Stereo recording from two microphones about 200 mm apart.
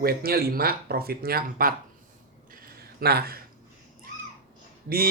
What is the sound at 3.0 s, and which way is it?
Speech, 50° right (ahead or behind).